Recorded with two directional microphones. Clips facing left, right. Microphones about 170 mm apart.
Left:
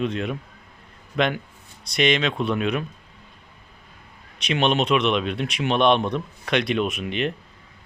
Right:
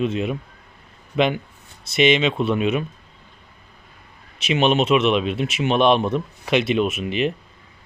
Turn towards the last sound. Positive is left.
turn(degrees=-5)  # may be behind; listen again after turning